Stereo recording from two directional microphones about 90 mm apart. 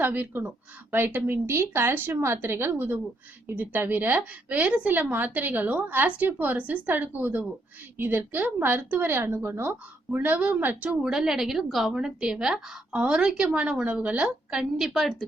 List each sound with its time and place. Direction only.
0.0 s a woman's voice: 20° right (ahead or behind); by 15.1 s 5° right (ahead or behind)